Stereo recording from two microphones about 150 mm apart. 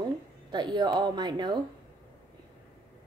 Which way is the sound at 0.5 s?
30° right (ahead or behind).